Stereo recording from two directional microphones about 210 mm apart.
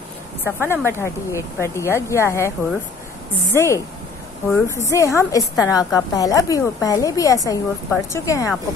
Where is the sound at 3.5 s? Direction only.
15° left (ahead or behind).